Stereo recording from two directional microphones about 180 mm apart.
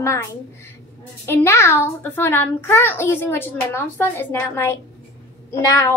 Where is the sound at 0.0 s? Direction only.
15° left (ahead or behind).